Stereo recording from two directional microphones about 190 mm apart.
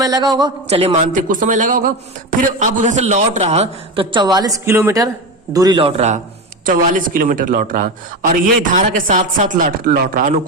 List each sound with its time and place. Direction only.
0.0 s a man's voice: 20° right (ahead or behind)
0.9 s a man's voice: 45° right (ahead or behind)
6.7 s a man's voice: 45° right (ahead or behind)